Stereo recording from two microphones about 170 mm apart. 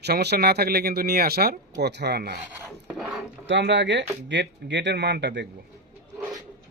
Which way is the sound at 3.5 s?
90° right.